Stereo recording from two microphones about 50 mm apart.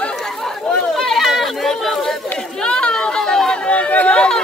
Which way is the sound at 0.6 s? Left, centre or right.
Centre.